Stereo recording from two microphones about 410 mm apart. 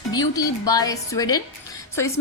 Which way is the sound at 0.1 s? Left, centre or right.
Centre.